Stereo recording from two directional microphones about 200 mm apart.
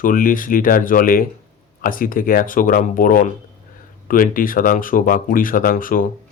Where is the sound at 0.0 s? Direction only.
45° left (ahead or behind).